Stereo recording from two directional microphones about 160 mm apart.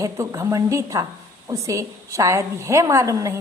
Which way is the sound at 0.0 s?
20° right (ahead or behind).